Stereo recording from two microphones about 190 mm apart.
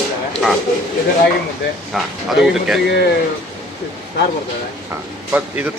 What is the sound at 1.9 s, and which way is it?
Speech, centre (ahead or behind).